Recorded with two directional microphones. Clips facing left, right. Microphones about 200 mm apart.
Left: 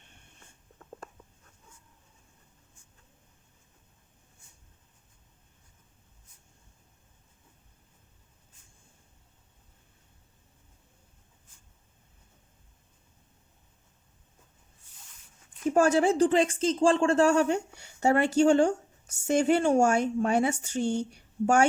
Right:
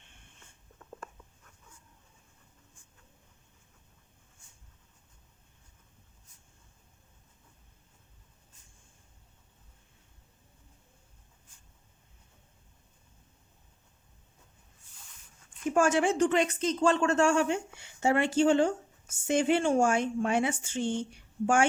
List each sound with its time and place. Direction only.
15.7 s speech: 35° left (ahead or behind)